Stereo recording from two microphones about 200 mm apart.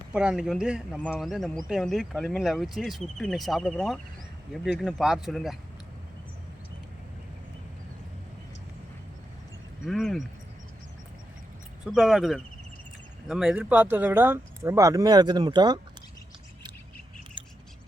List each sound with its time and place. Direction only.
0.1 s speech: 5° right (ahead or behind)
9.8 s speech: centre (ahead or behind)
11.9 s speech: centre (ahead or behind); by 15.8 s 20° right (ahead or behind)
17.4 s bird: 25° right (ahead or behind)